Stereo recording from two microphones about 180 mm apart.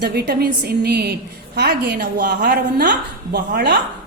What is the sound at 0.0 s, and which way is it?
A woman's voice, 60° right (ahead or behind).